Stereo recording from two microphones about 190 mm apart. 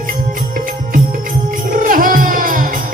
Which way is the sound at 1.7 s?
45° right (ahead or behind).